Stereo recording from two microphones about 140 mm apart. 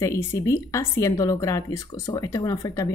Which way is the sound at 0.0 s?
20° left (ahead or behind).